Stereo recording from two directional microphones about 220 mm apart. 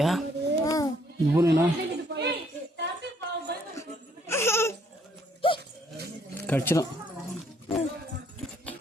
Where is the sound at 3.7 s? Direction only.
10° left (ahead or behind).